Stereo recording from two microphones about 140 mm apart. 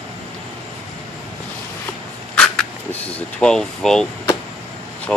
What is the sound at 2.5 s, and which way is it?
Speech, 10° left (ahead or behind).